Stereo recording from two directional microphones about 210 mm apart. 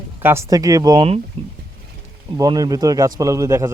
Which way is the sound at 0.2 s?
10° right (ahead or behind).